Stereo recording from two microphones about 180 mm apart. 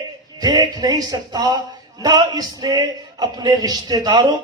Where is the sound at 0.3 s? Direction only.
20° right (ahead or behind).